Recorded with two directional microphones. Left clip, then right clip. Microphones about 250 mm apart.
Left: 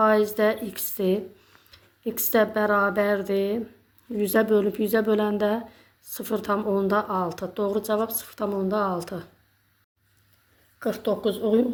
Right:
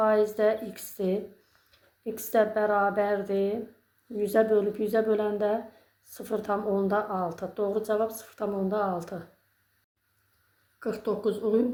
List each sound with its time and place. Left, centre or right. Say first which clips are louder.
0.3 s a woman's voice: left 2 dB; left
1.7 s a sound: left 4 dB; left
2.3 s a woman's voice: left 2 dB; left
11.0 s a woman's voice: left 3 dB; left